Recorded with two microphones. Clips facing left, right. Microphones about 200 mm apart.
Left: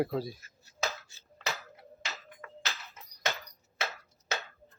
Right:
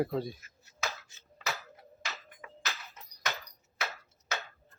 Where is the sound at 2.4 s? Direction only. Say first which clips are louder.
Left 2 dB; 10° right (ahead or behind).